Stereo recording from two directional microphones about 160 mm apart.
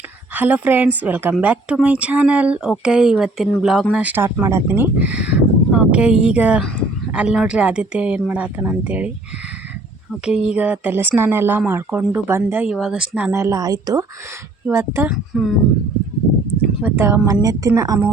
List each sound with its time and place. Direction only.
0.3 s speech: 10° right (ahead or behind)
10.2 s speech: 5° right (ahead or behind)
15.1 s speech: centre (ahead or behind)
16.8 s a woman's voice: 15° right (ahead or behind)